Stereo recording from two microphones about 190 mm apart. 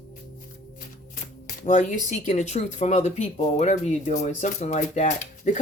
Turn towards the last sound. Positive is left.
turn(degrees=40)  # may be behind; listen again after turning